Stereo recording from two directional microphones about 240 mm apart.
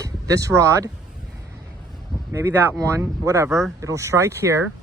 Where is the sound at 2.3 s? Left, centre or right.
Centre.